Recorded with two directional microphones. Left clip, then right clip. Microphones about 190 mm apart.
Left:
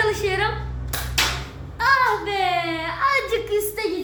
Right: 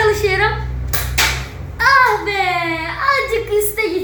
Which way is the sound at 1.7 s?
20° left (ahead or behind).